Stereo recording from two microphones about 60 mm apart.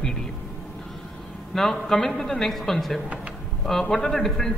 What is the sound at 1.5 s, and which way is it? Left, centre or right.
A woman's voice, centre.